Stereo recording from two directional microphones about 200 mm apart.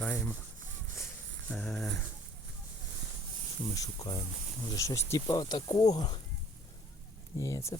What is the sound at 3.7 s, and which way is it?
Speech, 20° left (ahead or behind).